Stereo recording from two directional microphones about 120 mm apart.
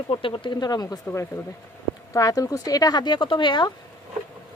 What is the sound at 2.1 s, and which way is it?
Speech, 30° left (ahead or behind).